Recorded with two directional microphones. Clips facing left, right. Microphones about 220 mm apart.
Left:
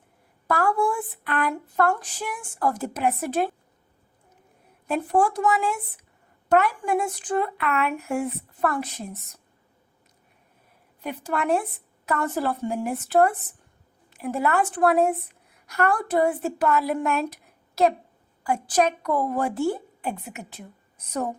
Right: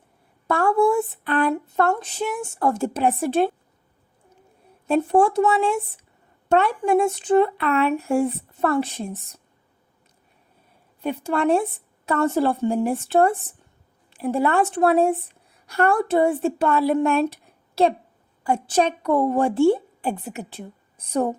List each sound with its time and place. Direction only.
0.4 s speech: 25° right (ahead or behind)
4.9 s speech: 25° right (ahead or behind)
11.0 s speech: 30° right (ahead or behind)